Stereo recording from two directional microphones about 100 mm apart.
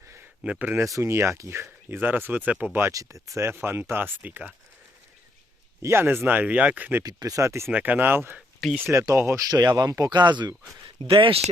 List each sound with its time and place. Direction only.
0.4 s speech: 15° right (ahead or behind)
0.9 s speech: 25° right (ahead or behind)
2.9 s speech: 35° right (ahead or behind); by 4.5 s 15° right (ahead or behind)
5.8 s speech: 25° right (ahead or behind)
7.0 s speech: 40° right (ahead or behind)
7.7 s speech: 15° right (ahead or behind)
8.9 s speech: 30° right (ahead or behind); by 10.9 s 45° right (ahead or behind)
11.0 s speech: 60° right (ahead or behind)